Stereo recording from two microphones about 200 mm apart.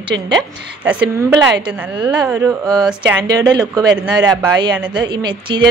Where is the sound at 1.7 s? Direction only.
10° right (ahead or behind).